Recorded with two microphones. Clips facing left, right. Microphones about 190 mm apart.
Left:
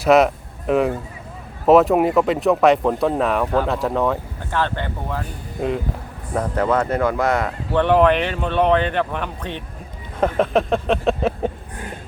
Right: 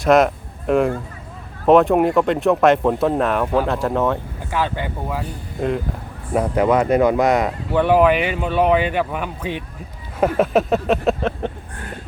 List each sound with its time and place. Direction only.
0.0 s speech: centre (ahead or behind)
6.3 s speech: 15° right (ahead or behind)
7.7 s speech: 5° right (ahead or behind)
10.2 s a sound: 5° right (ahead or behind)